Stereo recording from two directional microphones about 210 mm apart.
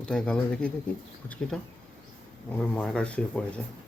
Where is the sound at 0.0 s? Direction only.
5° left (ahead or behind).